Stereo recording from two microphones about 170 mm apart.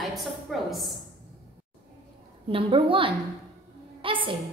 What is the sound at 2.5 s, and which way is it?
Speech, 30° right (ahead or behind).